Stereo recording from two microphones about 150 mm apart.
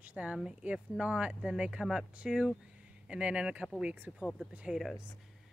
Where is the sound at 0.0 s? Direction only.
10° right (ahead or behind).